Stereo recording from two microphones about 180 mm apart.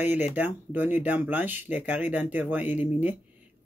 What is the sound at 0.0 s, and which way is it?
Speech, 10° right (ahead or behind).